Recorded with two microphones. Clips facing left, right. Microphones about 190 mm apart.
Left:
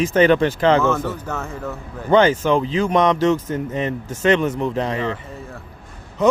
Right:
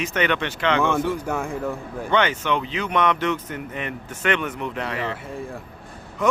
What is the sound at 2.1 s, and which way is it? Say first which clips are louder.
A man's voice: left 7 dB; 35° left (ahead or behind).